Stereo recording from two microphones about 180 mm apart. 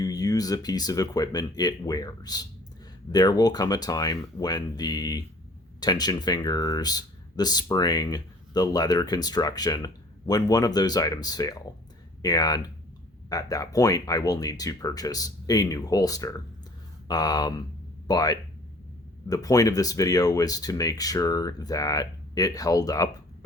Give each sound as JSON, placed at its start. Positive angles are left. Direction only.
{"t": 0.0, "sound": "speech", "side_deg": 20}